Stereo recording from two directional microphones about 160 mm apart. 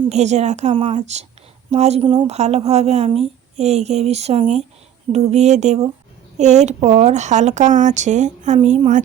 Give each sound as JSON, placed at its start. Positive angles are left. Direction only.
{"t": 0.1, "sound": "speech", "side_deg": -45}